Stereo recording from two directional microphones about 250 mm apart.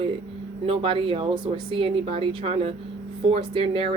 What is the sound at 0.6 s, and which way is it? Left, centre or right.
Speech, right.